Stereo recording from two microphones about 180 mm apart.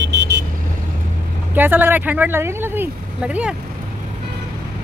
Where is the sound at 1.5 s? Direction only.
10° right (ahead or behind).